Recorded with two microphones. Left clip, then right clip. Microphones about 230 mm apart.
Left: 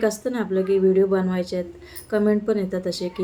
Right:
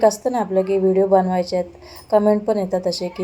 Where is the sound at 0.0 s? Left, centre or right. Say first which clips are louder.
Right 7 dB; centre.